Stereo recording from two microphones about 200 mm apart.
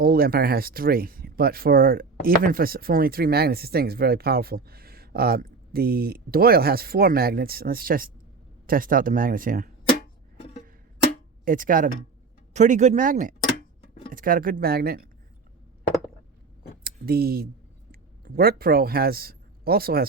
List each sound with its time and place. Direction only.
0.0 s speech: 50° right (ahead or behind)
11.4 s speech: 45° right (ahead or behind)
16.8 s speech: 50° right (ahead or behind)